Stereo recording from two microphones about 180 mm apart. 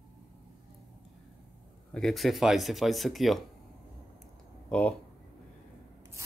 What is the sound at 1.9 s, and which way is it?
Speech, centre (ahead or behind).